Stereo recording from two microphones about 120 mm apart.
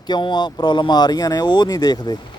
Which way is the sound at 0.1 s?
40° left (ahead or behind).